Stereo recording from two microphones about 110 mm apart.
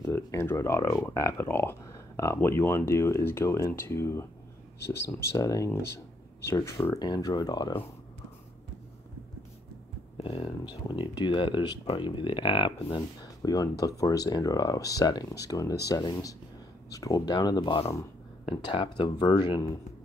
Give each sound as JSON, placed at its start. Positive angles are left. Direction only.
{"t": 0.1, "sound": "speech", "side_deg": 20}
{"t": 7.0, "sound": "speech", "side_deg": 40}
{"t": 10.1, "sound": "speech", "side_deg": 60}
{"t": 10.6, "sound": "speech", "side_deg": 45}
{"t": 13.4, "sound": "speech", "side_deg": 35}